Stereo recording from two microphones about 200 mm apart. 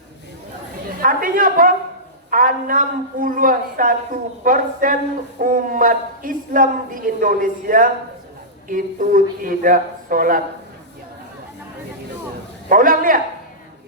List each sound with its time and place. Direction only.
1.0 s a sound: 45° right (ahead or behind)
2.3 s a woman's voice: 45° right (ahead or behind)
12.6 s a woman's voice: 45° right (ahead or behind)